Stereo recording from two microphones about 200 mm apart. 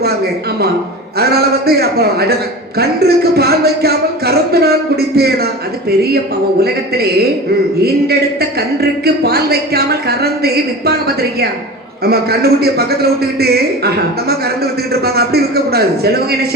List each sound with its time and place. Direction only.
1.2 s a man's voice: 50° right (ahead or behind)
6.6 s a man's voice: 50° right (ahead or behind)